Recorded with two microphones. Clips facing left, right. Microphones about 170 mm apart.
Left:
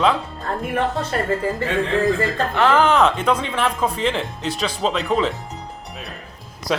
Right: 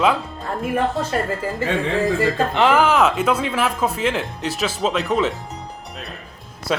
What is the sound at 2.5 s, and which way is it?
Speech, 20° right (ahead or behind).